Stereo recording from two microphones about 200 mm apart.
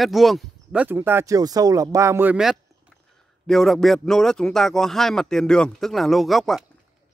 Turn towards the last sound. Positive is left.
turn(degrees=0)  # may be behind; listen again after turning